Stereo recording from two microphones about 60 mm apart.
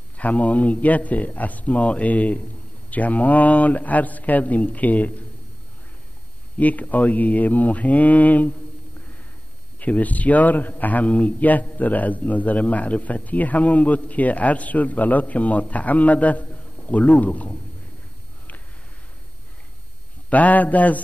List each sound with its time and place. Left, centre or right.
0.2 s a man's voice: left
6.6 s a man's voice: left
9.8 s a man's voice: left
20.2 s a man's voice: left